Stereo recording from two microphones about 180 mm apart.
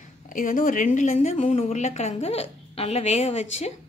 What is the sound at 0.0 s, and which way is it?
Speech, 45° left (ahead or behind).